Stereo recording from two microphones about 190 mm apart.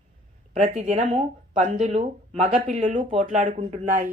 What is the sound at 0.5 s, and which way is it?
A woman's voice, 40° right (ahead or behind).